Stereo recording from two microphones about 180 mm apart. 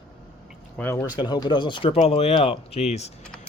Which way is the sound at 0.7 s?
10° left (ahead or behind).